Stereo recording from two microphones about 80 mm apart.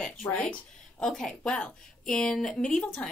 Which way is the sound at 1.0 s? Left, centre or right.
Centre.